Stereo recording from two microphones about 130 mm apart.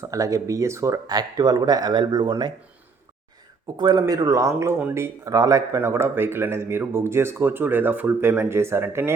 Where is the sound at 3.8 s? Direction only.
30° right (ahead or behind).